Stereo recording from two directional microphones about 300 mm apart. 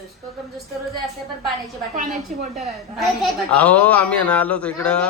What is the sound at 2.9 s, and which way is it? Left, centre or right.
A man's voice, centre.